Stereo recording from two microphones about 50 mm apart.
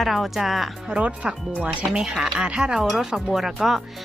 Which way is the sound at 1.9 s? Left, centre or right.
Centre.